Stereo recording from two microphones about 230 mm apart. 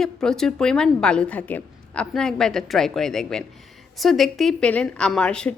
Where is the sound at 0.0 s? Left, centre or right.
Centre.